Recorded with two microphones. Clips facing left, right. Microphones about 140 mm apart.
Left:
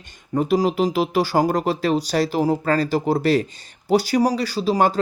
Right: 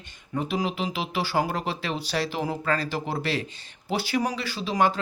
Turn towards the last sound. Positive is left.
turn(degrees=35)  # may be behind; listen again after turning